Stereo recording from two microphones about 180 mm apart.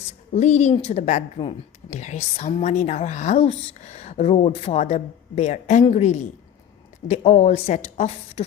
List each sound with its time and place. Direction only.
0.1 s a woman's voice: 40° left (ahead or behind)